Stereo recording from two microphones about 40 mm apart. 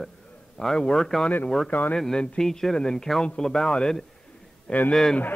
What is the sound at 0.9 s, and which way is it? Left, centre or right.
Speech, centre.